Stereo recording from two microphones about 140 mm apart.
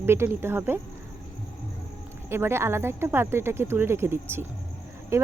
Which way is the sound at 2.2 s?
15° right (ahead or behind).